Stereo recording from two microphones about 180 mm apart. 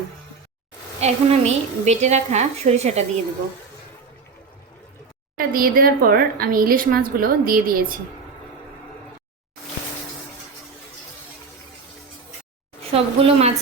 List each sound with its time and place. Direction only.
1.0 s a woman's voice: 40° right (ahead or behind)
5.4 s a woman's voice: 55° right (ahead or behind)
12.9 s a woman's voice: 30° right (ahead or behind)